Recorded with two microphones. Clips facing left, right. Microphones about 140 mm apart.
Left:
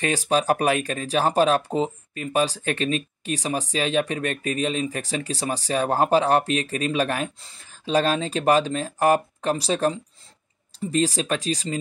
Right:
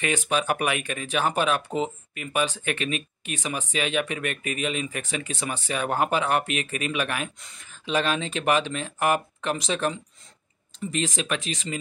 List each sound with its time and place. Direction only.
0.0 s speech: 35° left (ahead or behind)